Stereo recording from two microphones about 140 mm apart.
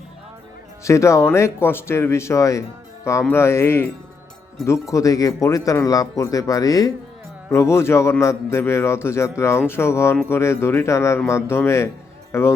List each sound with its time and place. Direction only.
0.9 s speech: 20° left (ahead or behind)